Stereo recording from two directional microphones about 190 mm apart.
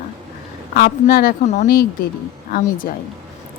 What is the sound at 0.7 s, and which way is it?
A woman's voice, 50° left (ahead or behind).